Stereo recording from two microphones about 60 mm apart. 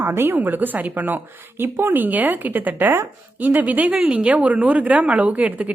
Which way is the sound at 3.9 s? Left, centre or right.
Centre.